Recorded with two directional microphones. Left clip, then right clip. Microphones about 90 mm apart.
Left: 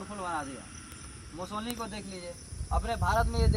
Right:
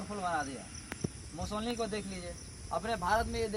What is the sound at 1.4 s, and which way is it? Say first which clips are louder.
Speech: left 1 dB; 35° right (ahead or behind).